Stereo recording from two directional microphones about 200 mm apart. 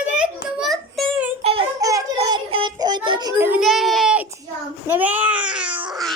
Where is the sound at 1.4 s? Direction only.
30° right (ahead or behind).